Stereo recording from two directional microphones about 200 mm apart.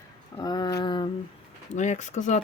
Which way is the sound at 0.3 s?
20° left (ahead or behind).